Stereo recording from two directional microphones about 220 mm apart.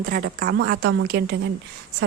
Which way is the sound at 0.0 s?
45° right (ahead or behind).